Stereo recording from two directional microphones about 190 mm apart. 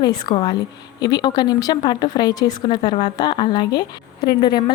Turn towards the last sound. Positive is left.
turn(degrees=25)  # may be behind; listen again after turning